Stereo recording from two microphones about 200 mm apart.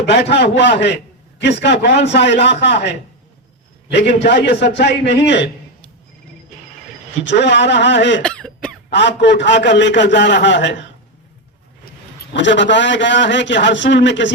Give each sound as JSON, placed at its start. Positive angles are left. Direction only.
{"t": 0.1, "sound": "a man's voice", "side_deg": 60}
{"t": 3.9, "sound": "a man's voice", "side_deg": 60}
{"t": 7.3, "sound": "a man's voice", "side_deg": 60}
{"t": 8.2, "sound": "cough", "side_deg": 5}
{"t": 8.9, "sound": "a man's voice", "side_deg": 60}
{"t": 12.3, "sound": "a man's voice", "side_deg": 65}